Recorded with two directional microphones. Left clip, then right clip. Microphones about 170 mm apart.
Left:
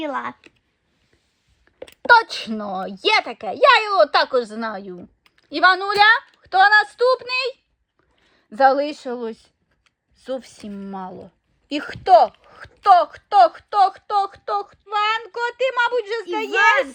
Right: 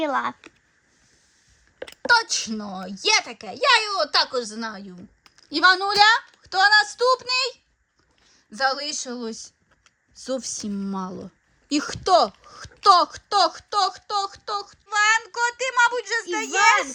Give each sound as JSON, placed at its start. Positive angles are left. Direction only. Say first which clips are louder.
{"t": 0.0, "sound": "speech", "louder": "right 2 dB", "side_deg": 0}
{"t": 1.8, "sound": "speech", "louder": "left 6 dB", "side_deg": -5}
{"t": 5.5, "sound": "speech", "louder": "left 2 dB", "side_deg": -20}
{"t": 8.4, "sound": "speech", "louder": "left 8 dB", "side_deg": 0}
{"t": 14.7, "sound": "speech", "louder": "right 4 dB", "side_deg": 0}